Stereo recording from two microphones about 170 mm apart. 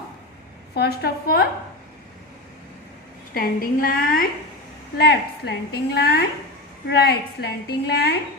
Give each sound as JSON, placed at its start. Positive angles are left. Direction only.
{"t": 0.7, "sound": "a woman's voice", "side_deg": 70}
{"t": 3.3, "sound": "a woman's voice", "side_deg": 55}
{"t": 4.9, "sound": "a woman's voice", "side_deg": 75}